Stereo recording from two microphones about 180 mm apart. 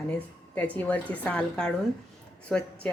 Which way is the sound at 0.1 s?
5° left (ahead or behind).